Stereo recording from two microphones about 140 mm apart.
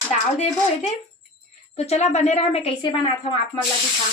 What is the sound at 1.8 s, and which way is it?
A woman's voice, 50° left (ahead or behind).